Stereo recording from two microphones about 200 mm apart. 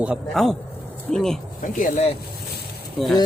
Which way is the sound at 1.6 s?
40° left (ahead or behind).